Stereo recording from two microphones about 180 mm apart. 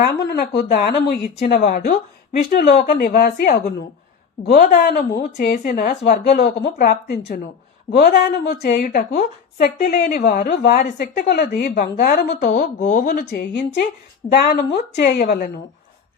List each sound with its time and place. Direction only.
0.0 s a woman's voice: 60° left (ahead or behind)
2.5 s a woman's voice: 60° left (ahead or behind)
12.3 s a woman's voice: 45° left (ahead or behind); by 15.4 s 60° left (ahead or behind)